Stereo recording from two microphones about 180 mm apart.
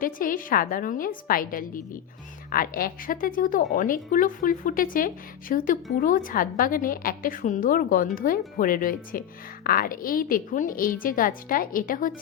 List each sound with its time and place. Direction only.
0.0 s speech: 50° left (ahead or behind)